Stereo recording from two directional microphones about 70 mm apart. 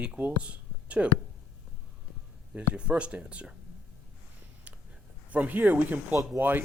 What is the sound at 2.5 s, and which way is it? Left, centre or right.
Speech, centre.